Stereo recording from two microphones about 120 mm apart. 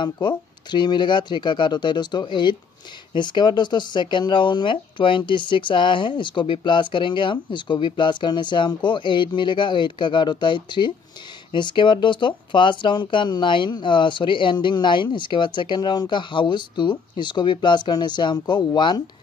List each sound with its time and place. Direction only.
0.0 s speech: 40° left (ahead or behind)